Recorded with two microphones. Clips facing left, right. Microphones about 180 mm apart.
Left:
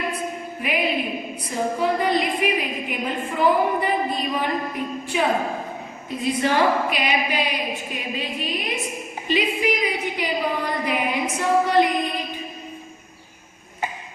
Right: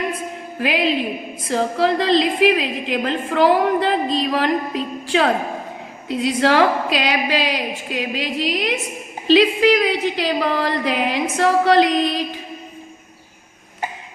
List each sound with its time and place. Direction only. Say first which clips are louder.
0.6 s a woman's voice: right 5 dB; 90° right